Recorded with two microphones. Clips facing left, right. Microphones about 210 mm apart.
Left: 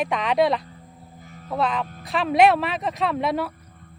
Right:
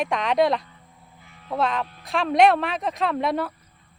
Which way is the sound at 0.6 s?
40° left (ahead or behind).